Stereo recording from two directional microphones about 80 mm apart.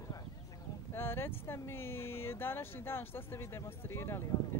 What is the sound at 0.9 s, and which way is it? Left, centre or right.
Speech, left.